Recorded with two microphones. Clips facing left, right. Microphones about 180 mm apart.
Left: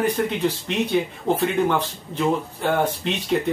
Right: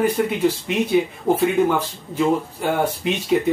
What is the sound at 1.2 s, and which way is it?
Speech, 10° right (ahead or behind).